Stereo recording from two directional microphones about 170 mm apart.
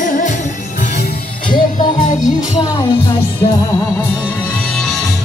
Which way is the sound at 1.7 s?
25° left (ahead or behind).